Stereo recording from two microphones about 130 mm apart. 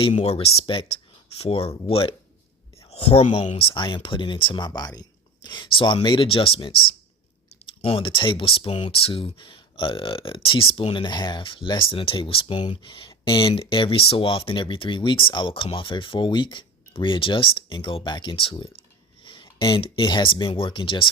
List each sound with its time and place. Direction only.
0.2 s speech: 50° left (ahead or behind)